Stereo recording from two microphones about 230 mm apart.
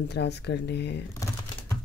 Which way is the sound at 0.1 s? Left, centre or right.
Left.